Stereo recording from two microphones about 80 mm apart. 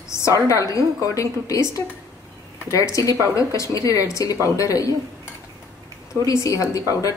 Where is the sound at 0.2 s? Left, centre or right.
Left.